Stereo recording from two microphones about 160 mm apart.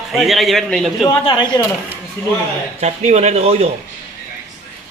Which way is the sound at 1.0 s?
30° left (ahead or behind).